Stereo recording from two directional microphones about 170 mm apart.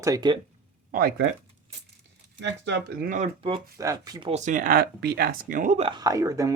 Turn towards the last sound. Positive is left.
turn(degrees=-20)  # may be behind; listen again after turning